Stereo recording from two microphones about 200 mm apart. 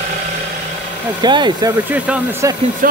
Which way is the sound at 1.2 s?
20° right (ahead or behind).